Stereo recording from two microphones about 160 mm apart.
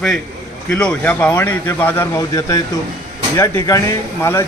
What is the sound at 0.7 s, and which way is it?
Speech, 5° left (ahead or behind).